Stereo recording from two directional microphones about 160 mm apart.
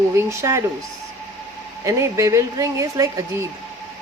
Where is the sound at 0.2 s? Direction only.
20° right (ahead or behind).